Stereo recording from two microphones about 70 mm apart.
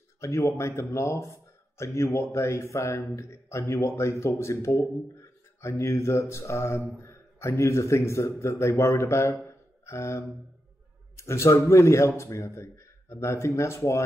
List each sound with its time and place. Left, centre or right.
0.2 s a man's voice: left
9.5 s a sound: left
11.1 s speech: left